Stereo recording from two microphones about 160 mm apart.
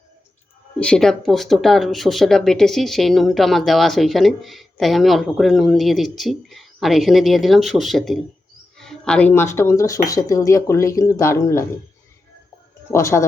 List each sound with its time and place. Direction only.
0.8 s speech: 5° left (ahead or behind)
12.9 s speech: 15° left (ahead or behind)